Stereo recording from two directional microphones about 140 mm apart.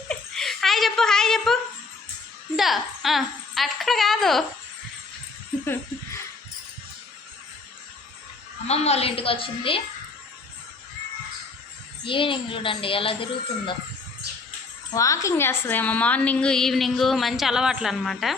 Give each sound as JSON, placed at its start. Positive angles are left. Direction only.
{"t": 0.1, "sound": "laughter", "side_deg": 0}
{"t": 2.6, "sound": "a woman's voice", "side_deg": 0}
{"t": 5.6, "sound": "a sound", "side_deg": 15}
{"t": 8.6, "sound": "a woman's voice", "side_deg": 50}
{"t": 12.0, "sound": "a child's voice", "side_deg": 40}
{"t": 14.9, "sound": "a woman's voice", "side_deg": 25}